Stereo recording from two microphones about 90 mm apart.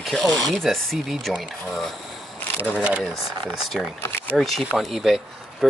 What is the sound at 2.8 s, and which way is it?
Speech, 15° right (ahead or behind).